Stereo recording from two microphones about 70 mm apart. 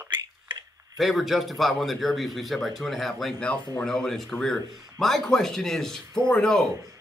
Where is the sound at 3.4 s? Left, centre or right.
Centre.